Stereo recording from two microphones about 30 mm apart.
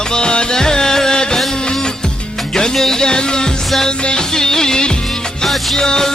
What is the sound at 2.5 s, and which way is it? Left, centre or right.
Music, centre.